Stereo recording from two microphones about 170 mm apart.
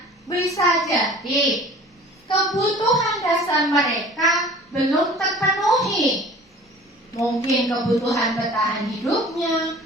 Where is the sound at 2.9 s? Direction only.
Centre (ahead or behind).